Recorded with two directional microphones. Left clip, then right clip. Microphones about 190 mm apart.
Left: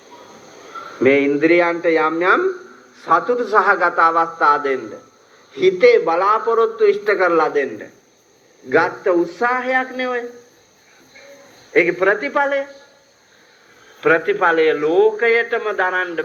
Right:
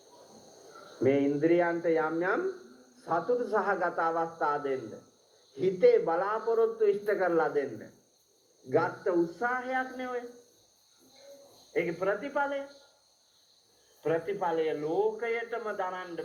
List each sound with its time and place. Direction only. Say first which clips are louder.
0.9 s a man's voice: left 12 dB; 20° left (ahead or behind)
11.7 s a man's voice: left 15 dB; 15° left (ahead or behind)
14.0 s a man's voice: left 15 dB; 15° left (ahead or behind)